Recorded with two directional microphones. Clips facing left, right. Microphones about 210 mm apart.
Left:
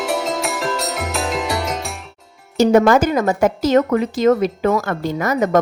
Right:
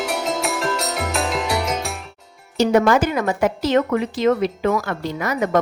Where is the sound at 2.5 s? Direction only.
45° left (ahead or behind).